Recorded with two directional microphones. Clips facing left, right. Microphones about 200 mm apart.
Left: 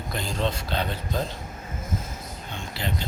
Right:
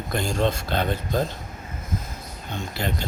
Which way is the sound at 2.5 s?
45° right (ahead or behind).